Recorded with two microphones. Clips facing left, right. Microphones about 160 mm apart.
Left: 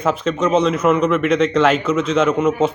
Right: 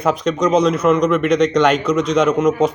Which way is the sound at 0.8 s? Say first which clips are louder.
Right 1 dB; 5° left (ahead or behind).